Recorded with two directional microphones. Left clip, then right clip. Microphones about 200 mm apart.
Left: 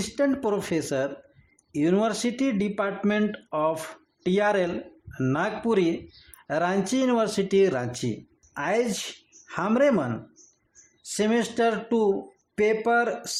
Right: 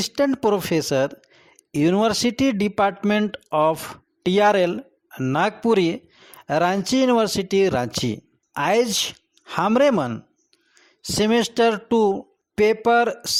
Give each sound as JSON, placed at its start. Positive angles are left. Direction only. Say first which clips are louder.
{"t": 0.0, "sound": "speech", "louder": "right 5 dB", "side_deg": -35}